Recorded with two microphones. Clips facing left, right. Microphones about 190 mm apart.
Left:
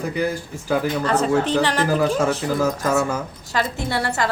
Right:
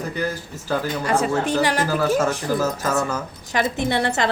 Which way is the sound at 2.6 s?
15° left (ahead or behind).